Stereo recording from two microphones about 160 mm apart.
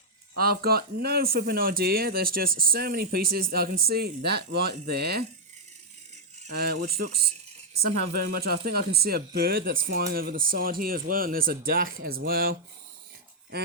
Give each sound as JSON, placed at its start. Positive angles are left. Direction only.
{"t": 0.3, "sound": "speech", "side_deg": -70}
{"t": 6.5, "sound": "speech", "side_deg": -75}